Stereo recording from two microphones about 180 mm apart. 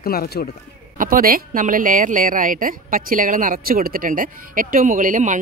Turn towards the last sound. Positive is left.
turn(degrees=-45)  # may be behind; listen again after turning